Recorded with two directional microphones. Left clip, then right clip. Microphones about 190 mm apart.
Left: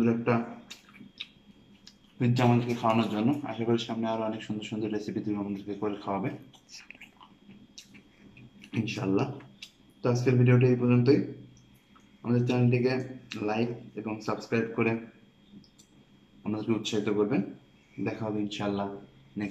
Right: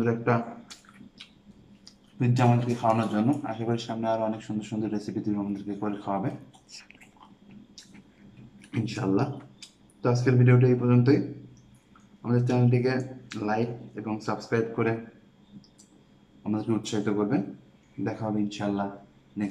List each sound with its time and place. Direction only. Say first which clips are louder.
0.2 s drip: right 2 dB; 5° right (ahead or behind)
2.1 s speech: right 1 dB; 5° right (ahead or behind)
8.5 s speech: right 1 dB; 5° right (ahead or behind)
12.2 s speech: right 2 dB; 5° right (ahead or behind)
16.4 s speech: right 1 dB; 5° right (ahead or behind)